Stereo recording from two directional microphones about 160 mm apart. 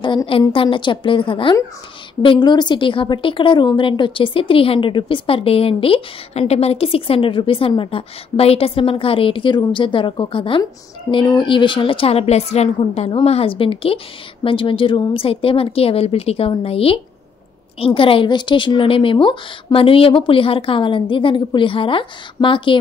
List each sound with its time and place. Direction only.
0.0 s a woman's voice: 30° left (ahead or behind)